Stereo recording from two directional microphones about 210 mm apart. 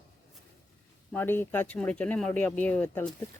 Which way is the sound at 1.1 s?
10° left (ahead or behind).